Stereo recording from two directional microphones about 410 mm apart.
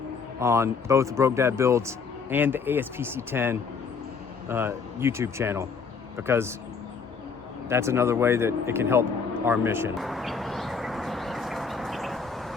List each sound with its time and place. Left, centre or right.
0.3 s speech: centre
7.7 s speech: centre
9.5 s a sound: centre